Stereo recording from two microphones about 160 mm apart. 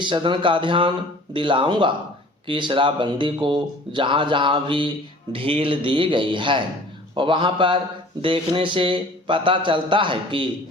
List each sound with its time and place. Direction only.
0.0 s speech: 30° right (ahead or behind)